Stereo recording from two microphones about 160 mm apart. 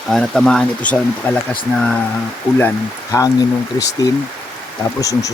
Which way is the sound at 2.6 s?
15° left (ahead or behind).